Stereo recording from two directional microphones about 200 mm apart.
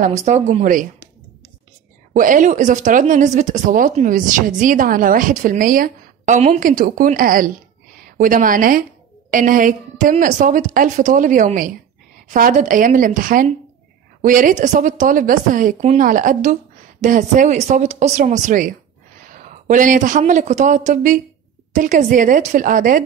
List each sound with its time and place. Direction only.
0.0 s speech: 35° right (ahead or behind)
2.1 s speech: 40° right (ahead or behind)